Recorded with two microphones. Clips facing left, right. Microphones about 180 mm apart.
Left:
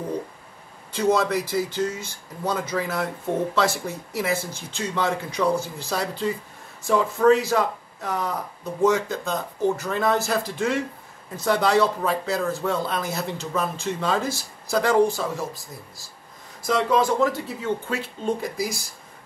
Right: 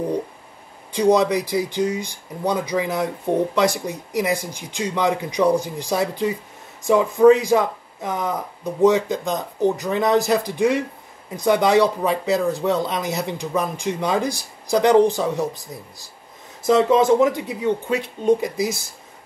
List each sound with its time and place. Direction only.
0.9 s speech: 15° right (ahead or behind)
16.6 s speech: 25° right (ahead or behind)